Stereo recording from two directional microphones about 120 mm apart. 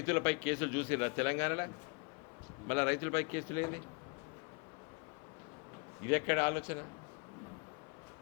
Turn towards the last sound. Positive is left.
turn(degrees=20)  # may be behind; listen again after turning